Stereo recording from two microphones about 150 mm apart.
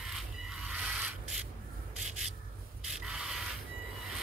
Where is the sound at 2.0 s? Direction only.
5° right (ahead or behind).